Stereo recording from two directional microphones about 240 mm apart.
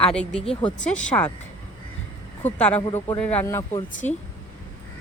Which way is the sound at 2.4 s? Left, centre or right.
Centre.